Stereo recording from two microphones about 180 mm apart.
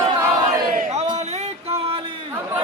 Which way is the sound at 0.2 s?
20° right (ahead or behind).